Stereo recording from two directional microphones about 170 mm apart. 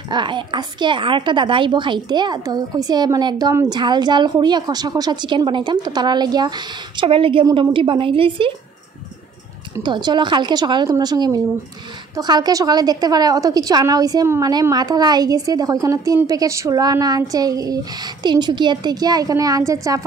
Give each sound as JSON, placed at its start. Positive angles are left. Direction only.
{"t": 0.1, "sound": "a woman's voice", "side_deg": -30}
{"t": 9.8, "sound": "a woman's voice", "side_deg": -25}